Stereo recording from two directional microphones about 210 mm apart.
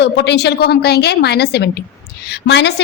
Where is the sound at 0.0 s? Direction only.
55° left (ahead or behind).